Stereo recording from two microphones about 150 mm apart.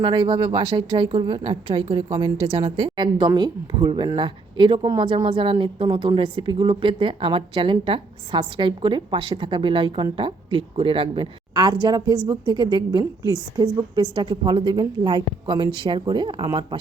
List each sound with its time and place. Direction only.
0.0 s a woman's voice: 35° right (ahead or behind)